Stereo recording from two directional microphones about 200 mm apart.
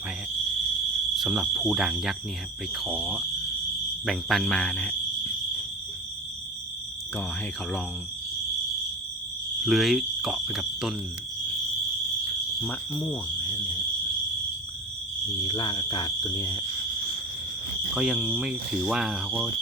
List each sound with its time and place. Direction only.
1.1 s speech: centre (ahead or behind)
4.0 s cricket: centre (ahead or behind)
9.6 s speech: centre (ahead or behind)
12.6 s cricket: 5° left (ahead or behind)
13.4 s cricket: 20° left (ahead or behind)
15.4 s speech: 25° left (ahead or behind)
17.9 s speech: 5° right (ahead or behind)